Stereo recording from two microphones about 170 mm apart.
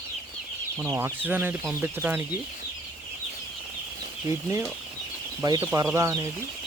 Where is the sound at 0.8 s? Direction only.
15° right (ahead or behind).